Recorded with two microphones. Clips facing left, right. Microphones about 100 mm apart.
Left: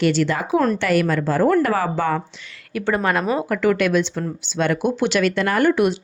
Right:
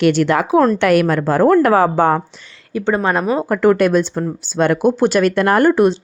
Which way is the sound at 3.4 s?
40° right (ahead or behind).